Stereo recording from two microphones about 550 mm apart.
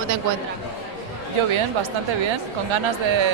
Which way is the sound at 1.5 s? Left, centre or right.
Right.